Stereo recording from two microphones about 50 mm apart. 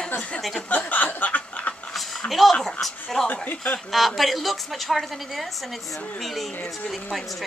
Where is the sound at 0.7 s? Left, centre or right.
Left.